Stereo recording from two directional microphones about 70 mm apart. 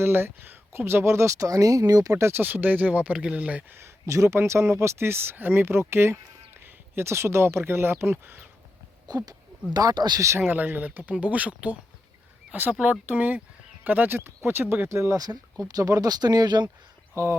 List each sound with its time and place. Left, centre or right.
0.0 s speech: right
2.1 s speech: right
2.4 s speech: right
3.8 s speech: right
9.0 s speech: right
9.7 s speech: right
10.2 s speech: right
10.4 s speech: right
12.8 s speech: right
14.8 s speech: right
15.6 s speech: right
17.2 s speech: right